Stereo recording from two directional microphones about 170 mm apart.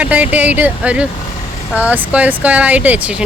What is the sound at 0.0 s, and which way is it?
Speech, 10° right (ahead or behind).